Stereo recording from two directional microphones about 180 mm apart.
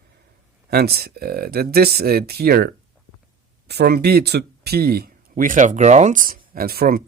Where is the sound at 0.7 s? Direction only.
60° right (ahead or behind).